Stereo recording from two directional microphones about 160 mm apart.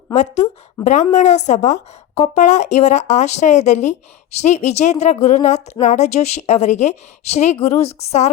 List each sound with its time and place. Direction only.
0.1 s a woman's voice: 45° left (ahead or behind)